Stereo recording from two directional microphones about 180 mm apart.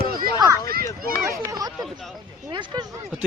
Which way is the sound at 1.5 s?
20° right (ahead or behind).